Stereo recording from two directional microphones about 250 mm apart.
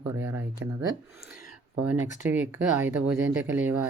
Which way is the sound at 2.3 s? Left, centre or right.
Centre.